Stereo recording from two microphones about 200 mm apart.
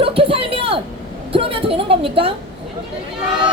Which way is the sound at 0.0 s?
30° right (ahead or behind).